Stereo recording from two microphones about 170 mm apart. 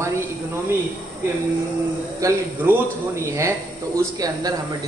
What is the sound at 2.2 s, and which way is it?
Speech, 15° right (ahead or behind).